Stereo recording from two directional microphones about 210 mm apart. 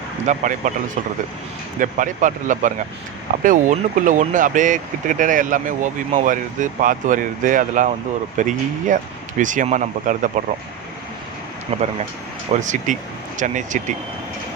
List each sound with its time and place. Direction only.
0.3 s speech: 35° right (ahead or behind)
1.8 s speech: 40° right (ahead or behind)
11.7 s speech: 30° right (ahead or behind)